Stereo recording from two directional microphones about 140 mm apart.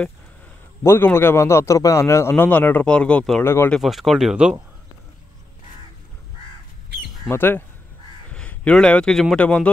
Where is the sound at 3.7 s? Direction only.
Centre (ahead or behind).